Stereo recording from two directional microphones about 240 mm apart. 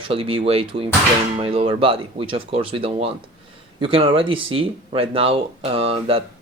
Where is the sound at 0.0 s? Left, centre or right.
Right.